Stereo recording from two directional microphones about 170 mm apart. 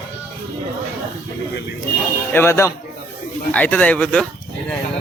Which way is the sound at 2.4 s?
15° left (ahead or behind).